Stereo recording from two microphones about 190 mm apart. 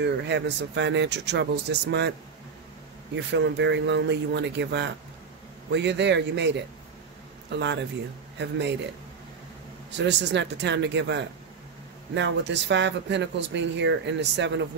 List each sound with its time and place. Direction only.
0.0 s speech: 65° right (ahead or behind)
3.2 s speech: 65° right (ahead or behind)
9.8 s speech: 65° right (ahead or behind)